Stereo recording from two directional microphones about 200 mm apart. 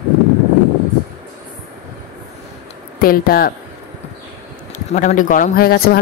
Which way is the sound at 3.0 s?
45° left (ahead or behind).